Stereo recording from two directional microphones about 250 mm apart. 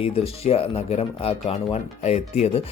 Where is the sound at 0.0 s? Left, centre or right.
Left.